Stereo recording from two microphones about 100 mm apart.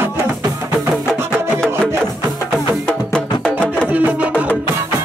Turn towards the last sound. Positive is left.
turn(degrees=-15)  # may be behind; listen again after turning